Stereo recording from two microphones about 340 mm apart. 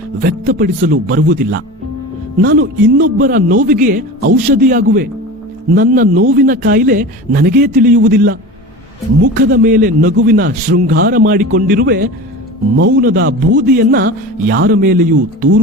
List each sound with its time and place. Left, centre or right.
0.2 s speech: right